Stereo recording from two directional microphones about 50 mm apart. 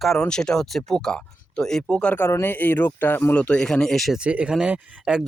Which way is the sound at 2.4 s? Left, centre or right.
Left.